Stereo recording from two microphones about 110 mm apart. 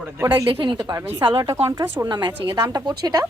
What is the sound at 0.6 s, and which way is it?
Speech, 45° right (ahead or behind).